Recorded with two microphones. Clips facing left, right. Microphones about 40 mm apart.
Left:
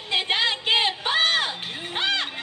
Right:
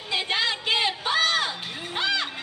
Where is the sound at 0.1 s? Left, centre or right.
Left.